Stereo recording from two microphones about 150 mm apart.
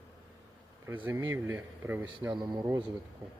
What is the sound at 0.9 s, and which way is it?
Speech, 15° right (ahead or behind).